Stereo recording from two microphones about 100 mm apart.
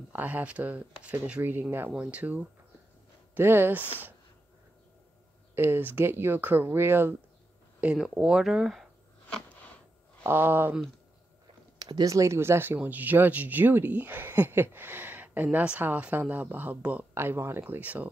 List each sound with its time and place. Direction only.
0.1 s speech: 20° right (ahead or behind)
5.5 s speech: 20° right (ahead or behind)
7.8 s speech: 5° right (ahead or behind)
10.2 s speech: 20° right (ahead or behind)
11.8 s speech: 40° right (ahead or behind); by 18.1 s 15° right (ahead or behind)